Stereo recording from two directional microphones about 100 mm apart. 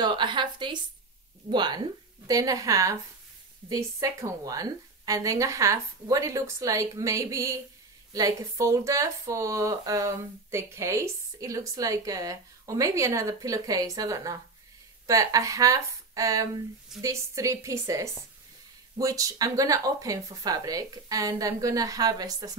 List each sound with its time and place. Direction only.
0.0 s speech: 50° right (ahead or behind)